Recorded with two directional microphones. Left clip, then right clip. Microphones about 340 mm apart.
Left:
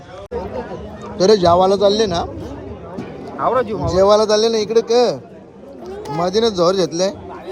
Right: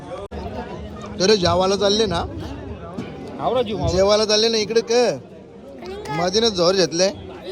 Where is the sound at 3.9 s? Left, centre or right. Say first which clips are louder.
Left 5 dB; centre.